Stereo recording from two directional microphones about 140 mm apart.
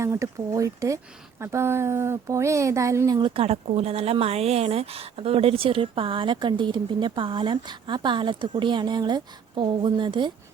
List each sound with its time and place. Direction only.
0.0 s speech: 20° right (ahead or behind)
3.2 s speech: 40° right (ahead or behind)